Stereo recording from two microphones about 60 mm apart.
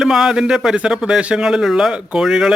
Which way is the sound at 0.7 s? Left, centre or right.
Centre.